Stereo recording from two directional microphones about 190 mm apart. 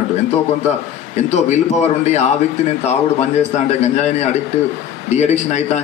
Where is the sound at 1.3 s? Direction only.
35° left (ahead or behind).